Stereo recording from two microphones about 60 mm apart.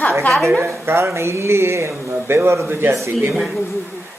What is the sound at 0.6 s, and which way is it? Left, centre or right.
Speech, right.